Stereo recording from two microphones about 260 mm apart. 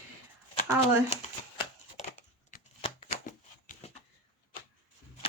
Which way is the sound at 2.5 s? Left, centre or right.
Left.